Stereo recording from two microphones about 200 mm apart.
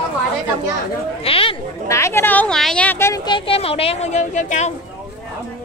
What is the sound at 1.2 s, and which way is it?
Speech, 30° left (ahead or behind).